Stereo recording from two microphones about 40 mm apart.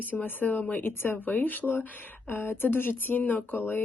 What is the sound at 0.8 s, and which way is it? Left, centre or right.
Speech, left.